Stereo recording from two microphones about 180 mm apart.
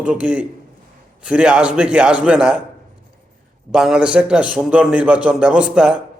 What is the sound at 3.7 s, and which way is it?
A man's voice, 5° right (ahead or behind).